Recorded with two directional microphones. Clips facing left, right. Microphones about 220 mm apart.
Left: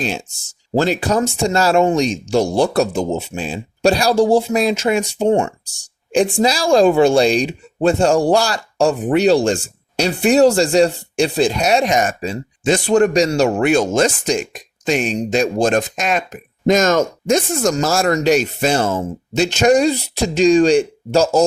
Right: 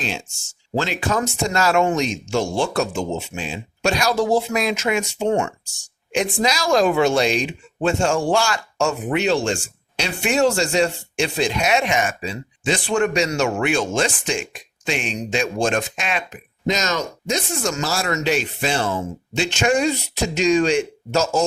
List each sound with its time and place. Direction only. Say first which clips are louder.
0.0 s speech: left 5 dB; 40° left (ahead or behind)